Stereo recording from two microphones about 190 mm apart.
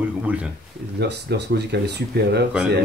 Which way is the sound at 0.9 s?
60° right (ahead or behind).